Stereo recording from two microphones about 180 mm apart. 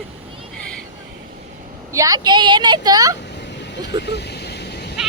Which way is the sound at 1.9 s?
20° right (ahead or behind).